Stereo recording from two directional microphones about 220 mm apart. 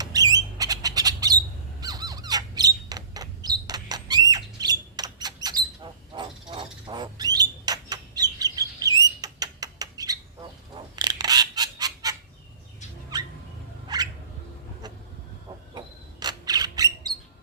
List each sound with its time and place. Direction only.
0.0 s squawk: 15° right (ahead or behind)
1.8 s squeak: 15° right (ahead or behind)
6.5 s bird: 20° right (ahead or behind)
9.0 s rodents: 15° right (ahead or behind)
10.9 s honk: 20° right (ahead or behind)
13.1 s rodents: 20° right (ahead or behind)
13.8 s bird: 20° right (ahead or behind)
16.2 s squawk: 15° right (ahead or behind)